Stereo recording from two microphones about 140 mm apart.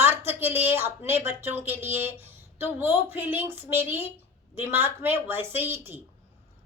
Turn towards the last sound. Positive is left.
turn(degrees=-15)  # may be behind; listen again after turning